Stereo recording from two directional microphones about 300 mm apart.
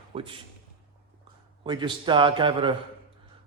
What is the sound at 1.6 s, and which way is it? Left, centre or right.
A man's voice, centre.